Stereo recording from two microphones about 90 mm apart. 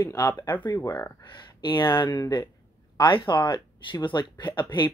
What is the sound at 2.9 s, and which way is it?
Speech, 65° left (ahead or behind).